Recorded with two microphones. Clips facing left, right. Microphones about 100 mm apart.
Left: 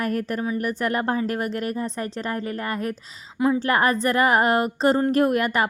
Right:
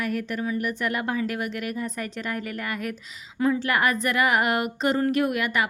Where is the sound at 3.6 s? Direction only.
35° left (ahead or behind).